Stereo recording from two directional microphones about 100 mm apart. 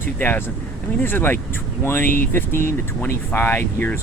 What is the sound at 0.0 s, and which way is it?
Speech, 20° left (ahead or behind).